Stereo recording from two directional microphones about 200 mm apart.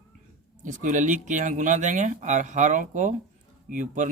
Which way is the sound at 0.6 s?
40° right (ahead or behind).